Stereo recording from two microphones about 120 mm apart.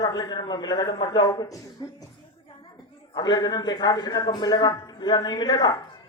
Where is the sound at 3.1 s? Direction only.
35° left (ahead or behind).